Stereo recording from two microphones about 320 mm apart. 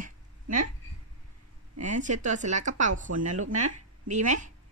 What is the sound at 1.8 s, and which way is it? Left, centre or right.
Wail, right.